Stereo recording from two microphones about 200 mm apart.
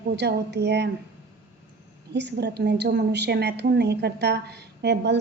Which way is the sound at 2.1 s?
60° right (ahead or behind).